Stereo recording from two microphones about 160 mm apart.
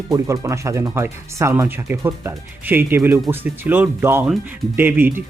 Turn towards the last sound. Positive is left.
turn(degrees=-10)  # may be behind; listen again after turning